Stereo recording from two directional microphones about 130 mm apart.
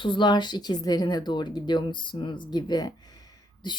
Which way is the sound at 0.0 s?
35° left (ahead or behind).